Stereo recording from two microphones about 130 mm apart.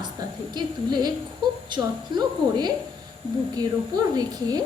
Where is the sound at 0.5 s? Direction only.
35° right (ahead or behind).